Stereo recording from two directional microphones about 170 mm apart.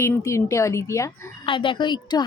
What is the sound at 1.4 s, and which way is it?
Speech, 30° left (ahead or behind).